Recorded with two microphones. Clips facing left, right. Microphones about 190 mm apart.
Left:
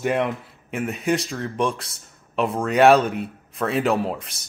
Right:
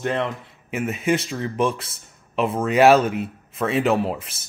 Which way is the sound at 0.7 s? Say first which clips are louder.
Right 1 dB; centre (ahead or behind).